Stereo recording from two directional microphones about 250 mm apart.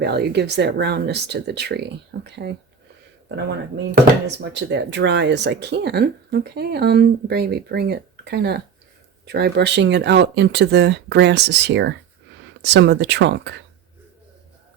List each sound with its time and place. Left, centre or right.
0.0 s speech: right
4.5 s speech: right